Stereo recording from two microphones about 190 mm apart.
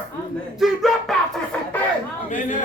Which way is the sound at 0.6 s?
Centre (ahead or behind).